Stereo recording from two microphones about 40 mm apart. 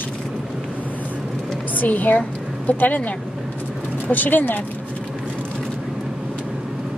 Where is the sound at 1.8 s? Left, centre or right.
Left.